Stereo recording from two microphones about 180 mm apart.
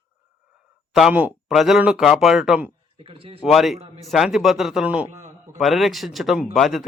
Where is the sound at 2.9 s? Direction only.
30° right (ahead or behind).